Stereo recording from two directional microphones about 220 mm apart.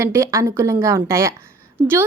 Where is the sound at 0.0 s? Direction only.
15° right (ahead or behind).